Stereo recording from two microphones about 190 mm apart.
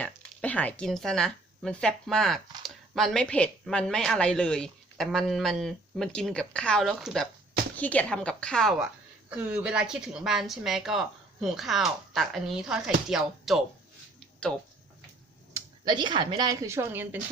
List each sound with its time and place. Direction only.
0.0 s a woman's voice: 5° left (ahead or behind)
15.5 s a woman's voice: 20° right (ahead or behind)